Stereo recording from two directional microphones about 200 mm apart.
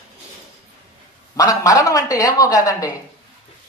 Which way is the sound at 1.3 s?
15° left (ahead or behind).